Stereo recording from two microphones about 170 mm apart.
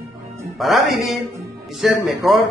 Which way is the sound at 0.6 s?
Centre (ahead or behind).